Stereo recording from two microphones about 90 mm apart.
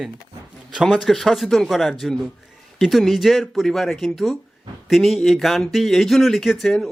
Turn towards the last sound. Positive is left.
turn(degrees=0)  # may be behind; listen again after turning